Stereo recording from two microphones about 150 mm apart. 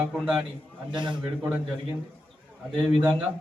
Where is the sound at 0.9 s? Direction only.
30° right (ahead or behind).